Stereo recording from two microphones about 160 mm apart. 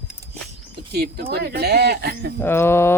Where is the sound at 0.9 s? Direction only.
80° right.